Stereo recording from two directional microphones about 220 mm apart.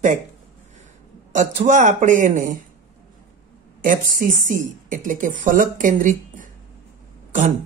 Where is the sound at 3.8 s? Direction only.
35° right (ahead or behind).